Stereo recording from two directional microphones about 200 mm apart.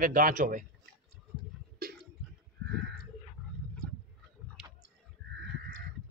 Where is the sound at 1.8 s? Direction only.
45° right (ahead or behind).